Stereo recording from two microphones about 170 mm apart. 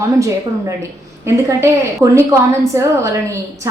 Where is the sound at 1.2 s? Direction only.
15° right (ahead or behind).